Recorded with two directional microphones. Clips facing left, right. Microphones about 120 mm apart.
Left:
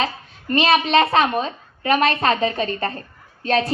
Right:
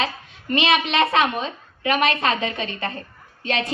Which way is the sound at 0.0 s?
35° left (ahead or behind).